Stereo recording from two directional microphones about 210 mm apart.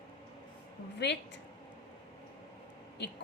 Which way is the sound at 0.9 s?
55° left (ahead or behind).